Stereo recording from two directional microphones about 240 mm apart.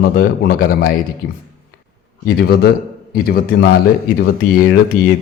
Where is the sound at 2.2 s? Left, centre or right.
Left.